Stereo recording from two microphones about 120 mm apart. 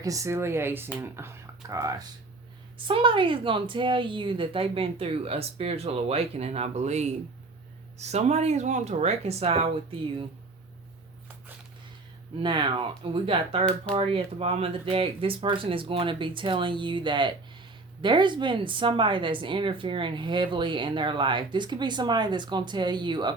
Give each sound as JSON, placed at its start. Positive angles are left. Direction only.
{"t": 0.0, "sound": "speech", "side_deg": -25}
{"t": 2.7, "sound": "speech", "side_deg": -45}
{"t": 12.4, "sound": "speech", "side_deg": -40}
{"t": 13.0, "sound": "speech", "side_deg": -50}